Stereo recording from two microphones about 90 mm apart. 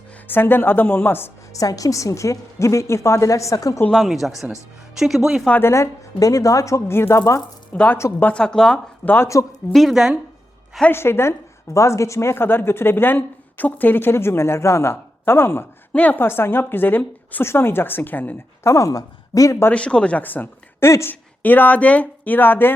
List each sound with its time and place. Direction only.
0.3 s a woman's voice: 25° left (ahead or behind)
1.5 s a woman's voice: 40° left (ahead or behind)
3.9 s speech: centre (ahead or behind)
5.5 s a woman's voice: 25° left (ahead or behind)
7.7 s a woman's voice: 15° left (ahead or behind)
9.0 s a woman's voice: 30° left (ahead or behind)
9.7 s speech: 5° right (ahead or behind)
10.9 s a woman's voice: 25° left (ahead or behind)
18.6 s a woman's voice: 35° left (ahead or behind)
19.7 s a woman's voice: 10° left (ahead or behind)